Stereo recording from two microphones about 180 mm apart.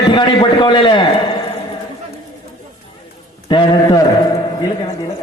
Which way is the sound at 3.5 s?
25° left (ahead or behind).